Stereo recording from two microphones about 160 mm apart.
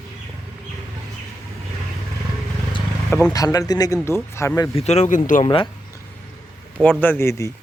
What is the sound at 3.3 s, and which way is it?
Speech, 20° left (ahead or behind).